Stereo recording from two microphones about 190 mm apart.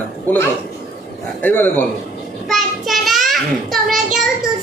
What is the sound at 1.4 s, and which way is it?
Speech, 10° left (ahead or behind).